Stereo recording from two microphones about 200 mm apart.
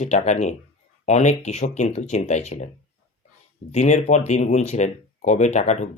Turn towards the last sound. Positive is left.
turn(degrees=35)  # may be behind; listen again after turning